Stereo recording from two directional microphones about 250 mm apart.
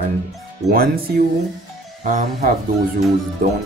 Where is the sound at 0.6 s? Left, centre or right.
Right.